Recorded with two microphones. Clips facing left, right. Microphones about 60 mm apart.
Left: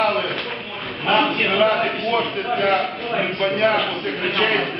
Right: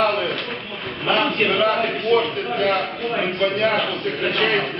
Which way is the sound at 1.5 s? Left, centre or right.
Centre.